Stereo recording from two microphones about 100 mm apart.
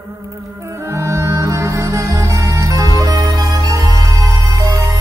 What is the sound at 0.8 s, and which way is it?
Music, 30° right (ahead or behind).